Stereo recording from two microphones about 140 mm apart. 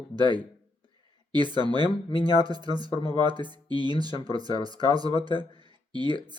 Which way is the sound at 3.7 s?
40° left (ahead or behind).